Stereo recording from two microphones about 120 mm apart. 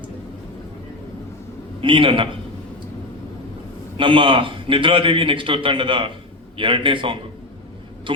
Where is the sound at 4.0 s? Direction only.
45° right (ahead or behind).